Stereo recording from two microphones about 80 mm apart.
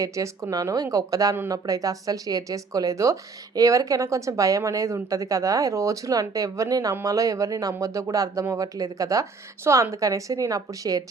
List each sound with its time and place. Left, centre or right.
0.0 s speech: right